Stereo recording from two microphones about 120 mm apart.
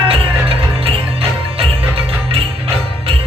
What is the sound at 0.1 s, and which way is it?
Music, 50° right (ahead or behind).